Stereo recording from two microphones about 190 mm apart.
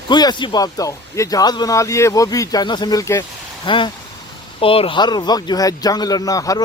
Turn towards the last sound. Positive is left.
turn(degrees=20)  # may be behind; listen again after turning